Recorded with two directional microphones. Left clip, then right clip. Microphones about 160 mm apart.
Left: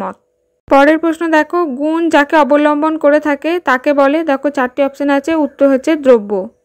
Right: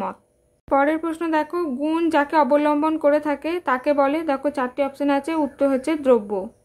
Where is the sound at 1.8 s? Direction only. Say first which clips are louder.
Left 7 dB; 25° left (ahead or behind).